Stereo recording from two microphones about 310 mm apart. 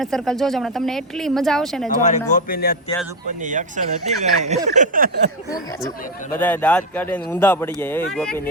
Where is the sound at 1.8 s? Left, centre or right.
Left.